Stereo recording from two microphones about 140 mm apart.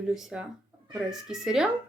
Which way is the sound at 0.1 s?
5° right (ahead or behind).